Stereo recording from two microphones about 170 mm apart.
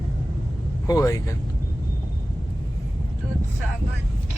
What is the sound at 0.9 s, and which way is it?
Speech, 20° left (ahead or behind).